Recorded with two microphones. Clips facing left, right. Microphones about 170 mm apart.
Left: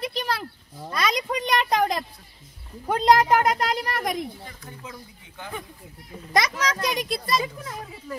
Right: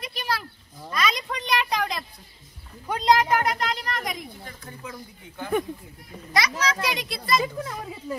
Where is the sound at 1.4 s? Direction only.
40° left (ahead or behind).